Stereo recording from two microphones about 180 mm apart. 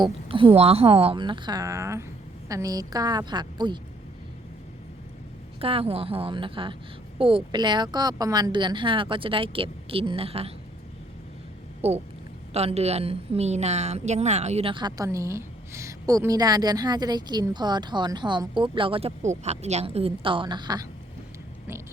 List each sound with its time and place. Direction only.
0.0 s a woman's voice: 30° right (ahead or behind)
5.5 s a woman's voice: 30° right (ahead or behind)
11.8 s a woman's voice: 35° right (ahead or behind)